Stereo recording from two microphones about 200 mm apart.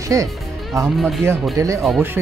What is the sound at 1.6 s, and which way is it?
Speech, 15° right (ahead or behind).